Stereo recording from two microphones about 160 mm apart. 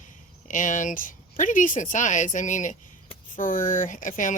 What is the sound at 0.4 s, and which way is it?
Speech, 55° left (ahead or behind).